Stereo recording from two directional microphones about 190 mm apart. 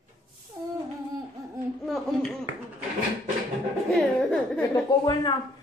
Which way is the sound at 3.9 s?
5° left (ahead or behind).